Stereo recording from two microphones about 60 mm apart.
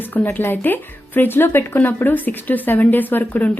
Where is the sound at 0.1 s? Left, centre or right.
Left.